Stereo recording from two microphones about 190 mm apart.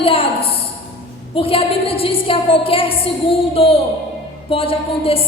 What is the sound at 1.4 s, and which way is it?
A woman's voice, 30° left (ahead or behind).